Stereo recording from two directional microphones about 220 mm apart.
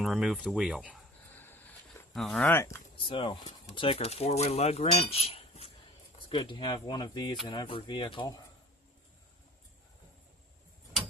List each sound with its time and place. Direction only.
0.0 s speech: centre (ahead or behind)
1.4 s a sound: 10° left (ahead or behind)
3.1 s speech: 25° left (ahead or behind)